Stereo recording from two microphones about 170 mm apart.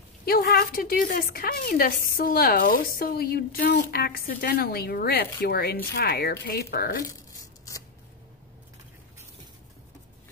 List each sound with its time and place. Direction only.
0.2 s a woman's voice: 65° left (ahead or behind)